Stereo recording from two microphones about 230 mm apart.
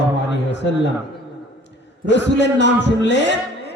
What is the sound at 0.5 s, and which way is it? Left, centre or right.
Speech, left.